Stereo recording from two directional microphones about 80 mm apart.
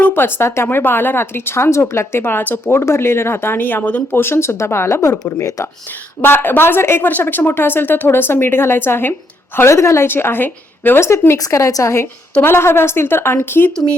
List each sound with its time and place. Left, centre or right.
0.0 s a woman's voice: left
5.2 s speech: left
6.2 s a woman's voice: left